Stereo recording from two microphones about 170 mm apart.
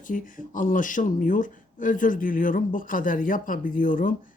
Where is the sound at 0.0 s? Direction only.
50° left (ahead or behind).